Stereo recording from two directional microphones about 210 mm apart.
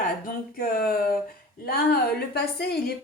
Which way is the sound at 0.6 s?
45° left (ahead or behind).